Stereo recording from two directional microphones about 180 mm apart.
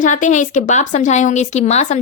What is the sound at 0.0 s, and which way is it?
Speech, 45° left (ahead or behind).